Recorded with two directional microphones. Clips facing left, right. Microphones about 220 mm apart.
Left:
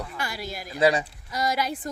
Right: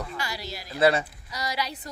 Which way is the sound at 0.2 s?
55° left (ahead or behind).